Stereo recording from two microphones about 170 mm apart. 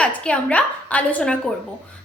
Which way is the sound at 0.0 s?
5° left (ahead or behind).